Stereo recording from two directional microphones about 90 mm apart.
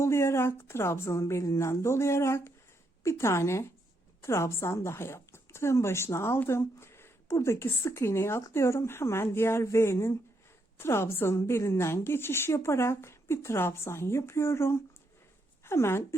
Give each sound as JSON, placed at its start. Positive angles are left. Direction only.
{"t": 0.0, "sound": "a woman's voice", "side_deg": 30}